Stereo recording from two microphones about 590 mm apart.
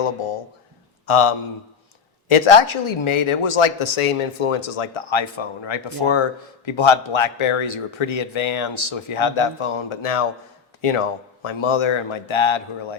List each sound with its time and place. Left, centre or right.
0.0 s speech: left